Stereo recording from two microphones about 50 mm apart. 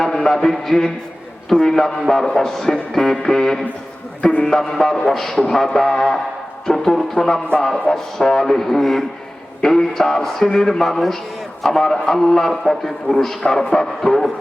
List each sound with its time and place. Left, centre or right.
0.0 s a sound: centre
1.5 s a man's voice: centre
4.2 s speech: left
4.4 s a man's voice: centre